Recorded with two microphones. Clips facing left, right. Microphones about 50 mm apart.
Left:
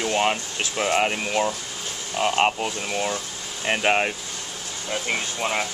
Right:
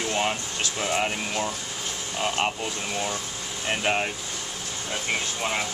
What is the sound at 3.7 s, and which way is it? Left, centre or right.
Speech, left.